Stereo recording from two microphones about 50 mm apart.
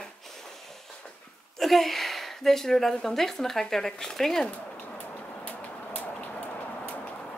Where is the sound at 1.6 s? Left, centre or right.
Centre.